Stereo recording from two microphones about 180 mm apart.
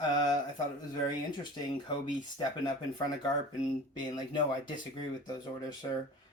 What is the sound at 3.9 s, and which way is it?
Music, 25° left (ahead or behind).